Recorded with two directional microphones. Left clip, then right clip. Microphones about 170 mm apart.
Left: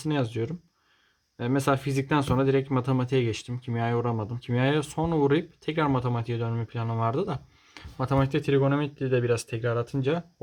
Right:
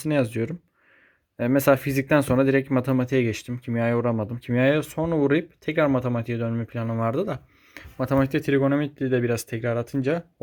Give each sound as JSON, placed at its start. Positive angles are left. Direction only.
{"t": 0.0, "sound": "speech", "side_deg": -25}